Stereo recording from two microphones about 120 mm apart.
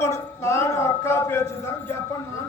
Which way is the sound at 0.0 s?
25° left (ahead or behind).